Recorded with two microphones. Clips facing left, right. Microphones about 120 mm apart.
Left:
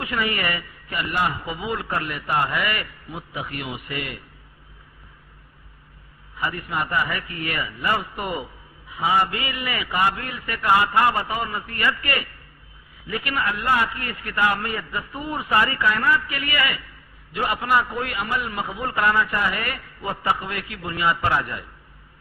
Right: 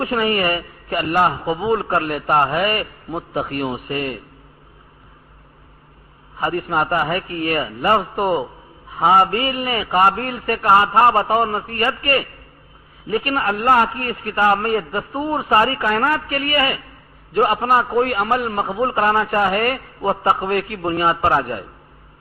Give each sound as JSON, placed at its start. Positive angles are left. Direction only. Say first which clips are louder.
{"t": 0.0, "sound": "a man's voice", "louder": "right 7 dB", "side_deg": -40}
{"t": 1.5, "sound": "a man's voice", "louder": "right 9 dB", "side_deg": -30}
{"t": 1.9, "sound": "a man's voice", "louder": "right 7 dB", "side_deg": -45}
{"t": 3.3, "sound": "a man's voice", "louder": "right 10 dB", "side_deg": -45}
{"t": 3.7, "sound": "a man's voice", "louder": "right 7 dB", "side_deg": -35}
{"t": 6.3, "sound": "a man's voice", "louder": "right 7 dB", "side_deg": -40}
{"t": 8.9, "sound": "a man's voice", "louder": "right 7 dB", "side_deg": -50}